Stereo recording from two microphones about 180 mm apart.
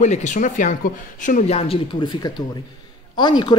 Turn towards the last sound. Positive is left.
turn(degrees=25)  # may be behind; listen again after turning